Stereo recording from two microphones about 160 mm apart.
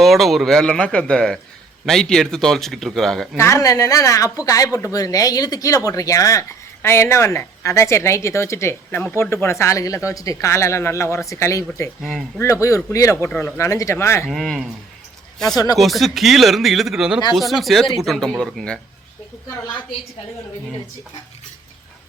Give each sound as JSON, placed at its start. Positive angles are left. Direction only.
{"t": 0.0, "sound": "speech", "side_deg": 0}
{"t": 3.3, "sound": "a woman's voice", "side_deg": 20}
{"t": 14.3, "sound": "speech", "side_deg": 0}
{"t": 15.5, "sound": "speech", "side_deg": 25}
{"t": 15.8, "sound": "speech", "side_deg": 0}